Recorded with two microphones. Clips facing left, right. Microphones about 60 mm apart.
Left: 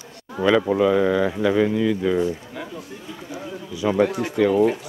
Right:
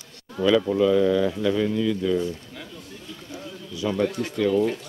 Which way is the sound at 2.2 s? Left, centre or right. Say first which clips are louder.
Left 5 dB; left.